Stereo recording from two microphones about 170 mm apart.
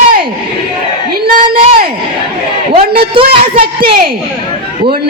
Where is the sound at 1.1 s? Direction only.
65° right (ahead or behind).